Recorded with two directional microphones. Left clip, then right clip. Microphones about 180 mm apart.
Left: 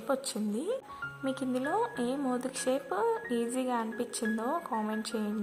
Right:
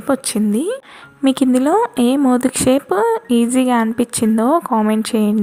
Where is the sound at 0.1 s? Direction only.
25° right (ahead or behind).